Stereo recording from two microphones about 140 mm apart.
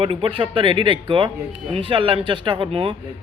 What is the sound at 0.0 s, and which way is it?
Speech, 40° right (ahead or behind).